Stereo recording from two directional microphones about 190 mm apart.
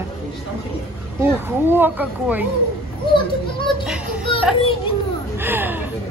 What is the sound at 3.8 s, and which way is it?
Speech, 5° right (ahead or behind).